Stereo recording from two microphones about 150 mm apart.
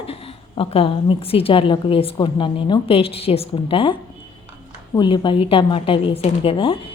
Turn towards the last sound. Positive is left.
turn(degrees=35)  # may be behind; listen again after turning